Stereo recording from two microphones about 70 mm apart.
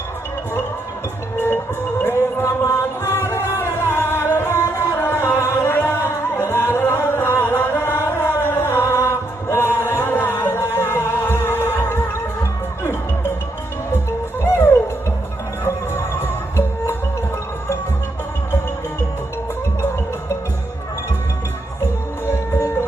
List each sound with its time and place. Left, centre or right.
2.0 s music: left
14.4 s music: left
22.3 s music: left